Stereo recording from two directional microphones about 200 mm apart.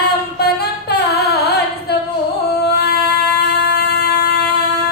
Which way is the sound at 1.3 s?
55° left (ahead or behind).